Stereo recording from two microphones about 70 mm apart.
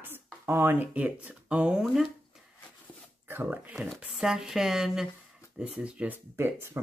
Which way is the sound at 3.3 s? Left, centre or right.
Right.